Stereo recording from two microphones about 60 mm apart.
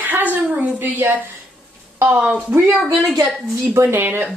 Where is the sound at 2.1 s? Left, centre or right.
Right.